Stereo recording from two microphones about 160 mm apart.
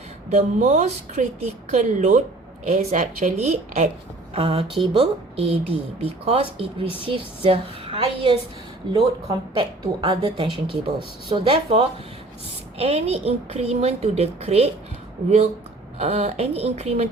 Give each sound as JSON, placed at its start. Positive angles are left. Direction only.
{"t": 0.3, "sound": "a woman's voice", "side_deg": -45}
{"t": 16.0, "sound": "speech", "side_deg": -40}